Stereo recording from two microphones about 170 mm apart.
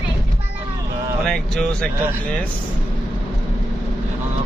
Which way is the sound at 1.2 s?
5° left (ahead or behind).